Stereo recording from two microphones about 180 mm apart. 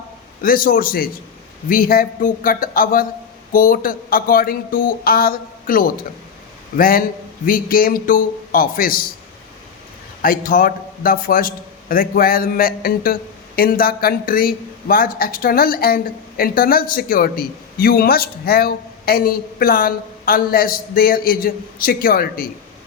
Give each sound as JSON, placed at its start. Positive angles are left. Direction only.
{"t": 0.4, "sound": "a man's voice", "side_deg": 50}
{"t": 10.2, "sound": "a man's voice", "side_deg": 50}